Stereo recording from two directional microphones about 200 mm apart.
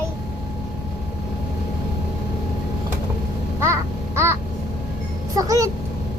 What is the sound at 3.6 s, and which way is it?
Crow, 15° right (ahead or behind).